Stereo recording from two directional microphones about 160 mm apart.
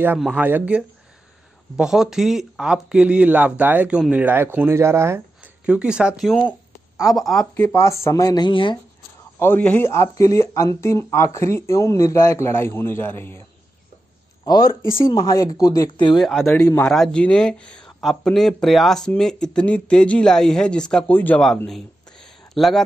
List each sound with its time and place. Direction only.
0.0 s speech: 10° right (ahead or behind); by 8.7 s 30° left (ahead or behind)
9.4 s speech: 10° left (ahead or behind)
14.4 s speech: 25° left (ahead or behind)
16.2 s speech: centre (ahead or behind)
21.6 s a sound: 5° left (ahead or behind)